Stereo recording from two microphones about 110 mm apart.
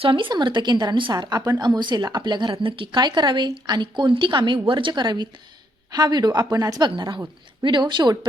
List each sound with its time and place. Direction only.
0.0 s a woman's voice: 50° right (ahead or behind); by 6.8 s 35° right (ahead or behind)
6.8 s a woman's voice: 45° right (ahead or behind)